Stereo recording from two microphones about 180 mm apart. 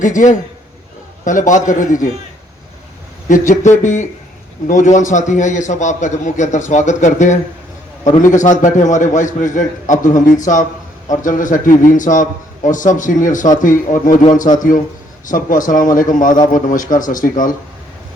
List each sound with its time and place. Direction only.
0.0 s a man's voice: 45° left (ahead or behind)
3.2 s a man's voice: 45° left (ahead or behind)
15.3 s a man's voice: 50° left (ahead or behind)